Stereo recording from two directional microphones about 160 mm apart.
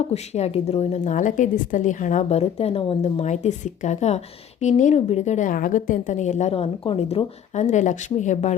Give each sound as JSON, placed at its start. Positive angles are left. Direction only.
{"t": 0.0, "sound": "a woman's voice", "side_deg": 40}